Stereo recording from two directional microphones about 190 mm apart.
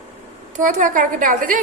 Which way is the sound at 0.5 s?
40° right (ahead or behind).